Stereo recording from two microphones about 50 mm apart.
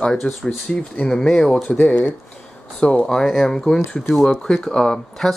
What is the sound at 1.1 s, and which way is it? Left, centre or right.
Speech, centre.